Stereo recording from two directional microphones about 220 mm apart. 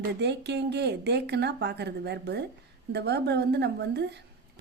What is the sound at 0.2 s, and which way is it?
Speech, 50° right (ahead or behind).